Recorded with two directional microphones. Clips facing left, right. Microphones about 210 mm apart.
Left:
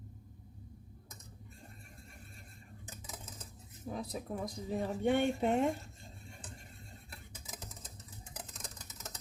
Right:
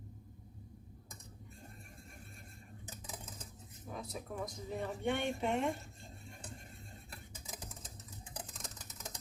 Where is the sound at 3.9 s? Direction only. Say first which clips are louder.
Left 5 dB; 35° left (ahead or behind).